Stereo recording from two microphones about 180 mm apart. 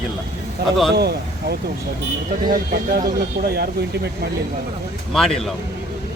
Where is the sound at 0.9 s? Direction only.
65° right (ahead or behind).